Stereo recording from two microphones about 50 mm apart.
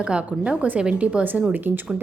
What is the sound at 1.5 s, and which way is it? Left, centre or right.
Speech, right.